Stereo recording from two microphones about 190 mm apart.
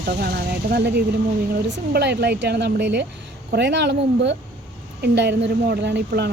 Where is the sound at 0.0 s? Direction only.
55° right (ahead or behind).